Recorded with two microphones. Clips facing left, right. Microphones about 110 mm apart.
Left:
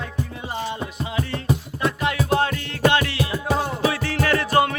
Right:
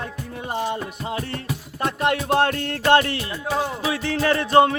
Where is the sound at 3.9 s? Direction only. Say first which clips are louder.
Right 1 dB; 20° right (ahead or behind).